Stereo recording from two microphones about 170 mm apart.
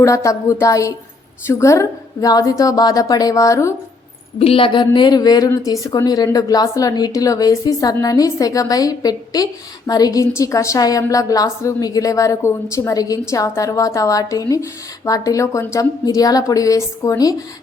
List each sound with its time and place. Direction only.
0.0 s a woman's voice: 20° left (ahead or behind)
4.4 s a woman's voice: 35° left (ahead or behind)